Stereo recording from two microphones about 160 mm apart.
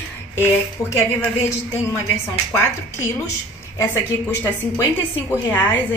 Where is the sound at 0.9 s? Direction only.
15° left (ahead or behind).